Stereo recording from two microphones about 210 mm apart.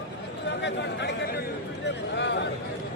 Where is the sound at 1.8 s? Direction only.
55° left (ahead or behind).